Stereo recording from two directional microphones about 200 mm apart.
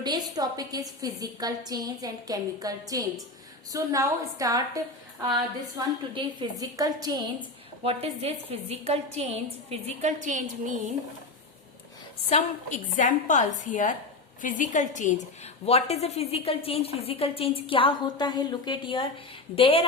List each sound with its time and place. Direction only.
0.0 s a woman's voice: 20° right (ahead or behind)
7.9 s a woman's voice: 30° right (ahead or behind)
12.3 s a woman's voice: 40° left (ahead or behind)